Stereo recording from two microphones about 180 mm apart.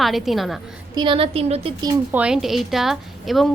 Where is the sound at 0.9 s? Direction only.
30° right (ahead or behind).